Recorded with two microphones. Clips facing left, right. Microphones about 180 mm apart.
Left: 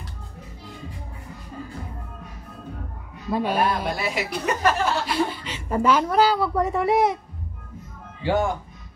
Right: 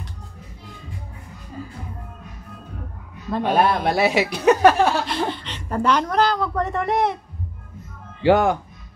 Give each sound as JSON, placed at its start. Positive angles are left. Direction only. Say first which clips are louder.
{"t": 3.3, "sound": "a man's voice", "louder": "right 1 dB", "side_deg": 10}
{"t": 3.5, "sound": "a woman's voice", "louder": "right 5 dB", "side_deg": -75}
{"t": 5.0, "sound": "a woman's voice", "louder": "even", "side_deg": 5}
{"t": 8.2, "sound": "speech", "louder": "right 6 dB", "side_deg": -90}